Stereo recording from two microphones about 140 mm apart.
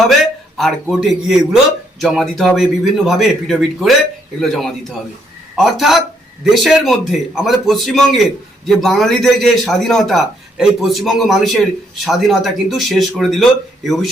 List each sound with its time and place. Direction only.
0.5 s a man's voice: centre (ahead or behind)